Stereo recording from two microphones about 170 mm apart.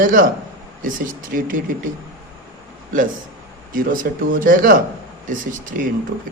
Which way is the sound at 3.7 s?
55° right (ahead or behind).